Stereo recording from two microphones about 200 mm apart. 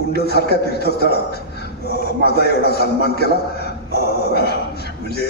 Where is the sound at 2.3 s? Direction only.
55° left (ahead or behind).